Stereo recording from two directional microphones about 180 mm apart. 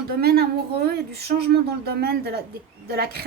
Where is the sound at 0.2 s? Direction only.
60° right (ahead or behind).